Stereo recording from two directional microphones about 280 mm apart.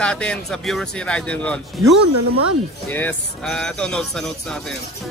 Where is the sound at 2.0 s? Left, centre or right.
Right.